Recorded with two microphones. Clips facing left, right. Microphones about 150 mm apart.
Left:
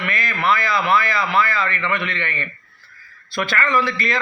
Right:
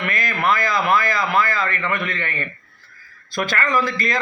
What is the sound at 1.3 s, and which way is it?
A man's voice, 45° right (ahead or behind).